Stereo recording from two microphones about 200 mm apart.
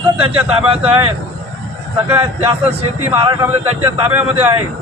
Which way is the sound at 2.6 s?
30° right (ahead or behind).